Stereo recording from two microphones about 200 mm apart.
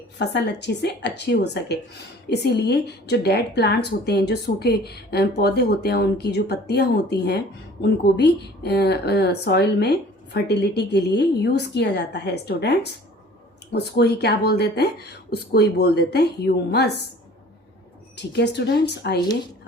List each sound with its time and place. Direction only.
0.2 s a woman's voice: 60° left (ahead or behind)
18.2 s a woman's voice: 60° left (ahead or behind)